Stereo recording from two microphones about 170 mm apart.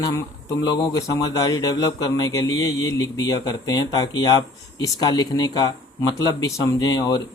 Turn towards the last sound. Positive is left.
turn(degrees=25)  # may be behind; listen again after turning